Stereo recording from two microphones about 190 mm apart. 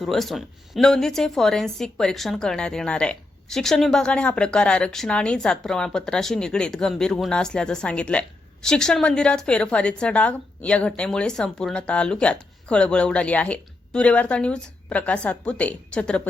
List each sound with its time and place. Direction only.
0.0 s a woman's voice: centre (ahead or behind)